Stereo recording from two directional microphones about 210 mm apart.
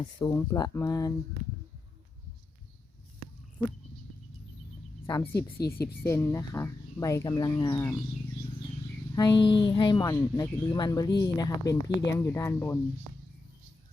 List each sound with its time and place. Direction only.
0.0 s speech: 15° left (ahead or behind)
5.0 s speech: 10° left (ahead or behind)
9.1 s speech: 20° left (ahead or behind)